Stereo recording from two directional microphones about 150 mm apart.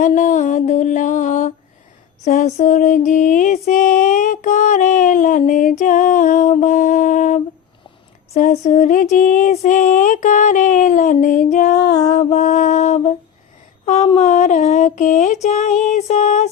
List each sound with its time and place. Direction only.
0.0 s music: 55° left (ahead or behind)
12.1 s mantra: 50° left (ahead or behind)
13.8 s a sound: 50° left (ahead or behind)